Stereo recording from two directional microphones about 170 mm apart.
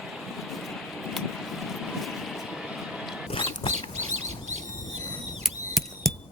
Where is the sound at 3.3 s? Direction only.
30° left (ahead or behind).